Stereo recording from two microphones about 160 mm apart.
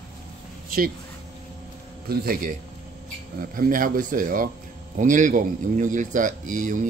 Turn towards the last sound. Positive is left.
turn(degrees=-55)  # may be behind; listen again after turning